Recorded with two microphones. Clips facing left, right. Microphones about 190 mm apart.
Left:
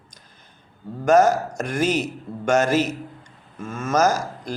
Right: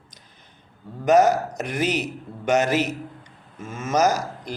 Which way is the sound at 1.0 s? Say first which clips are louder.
Left 1 dB; 15° right (ahead or behind).